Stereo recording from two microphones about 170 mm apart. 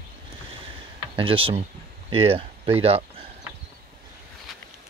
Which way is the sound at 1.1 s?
30° right (ahead or behind).